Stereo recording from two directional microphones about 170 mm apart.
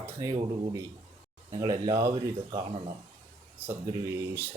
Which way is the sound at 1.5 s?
20° right (ahead or behind).